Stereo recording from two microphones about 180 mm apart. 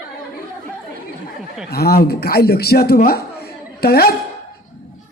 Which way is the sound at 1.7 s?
55° left (ahead or behind).